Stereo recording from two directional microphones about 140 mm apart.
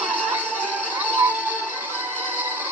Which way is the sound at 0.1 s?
10° right (ahead or behind).